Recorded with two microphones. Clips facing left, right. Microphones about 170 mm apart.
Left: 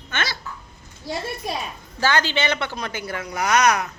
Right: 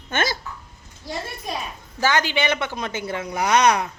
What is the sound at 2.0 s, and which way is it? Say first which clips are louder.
A woman's voice: even; 15° right (ahead or behind).